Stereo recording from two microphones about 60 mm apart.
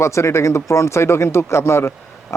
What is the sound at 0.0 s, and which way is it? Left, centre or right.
Speech, left.